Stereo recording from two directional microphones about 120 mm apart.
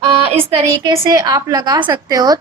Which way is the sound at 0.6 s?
25° right (ahead or behind).